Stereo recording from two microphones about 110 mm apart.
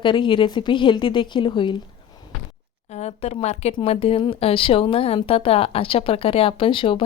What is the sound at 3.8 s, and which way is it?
Speech, 60° left (ahead or behind).